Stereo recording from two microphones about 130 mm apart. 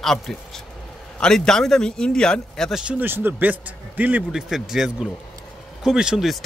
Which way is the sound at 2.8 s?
10° right (ahead or behind).